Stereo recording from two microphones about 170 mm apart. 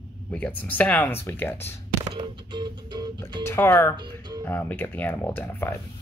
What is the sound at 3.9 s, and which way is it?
Music, 25° right (ahead or behind).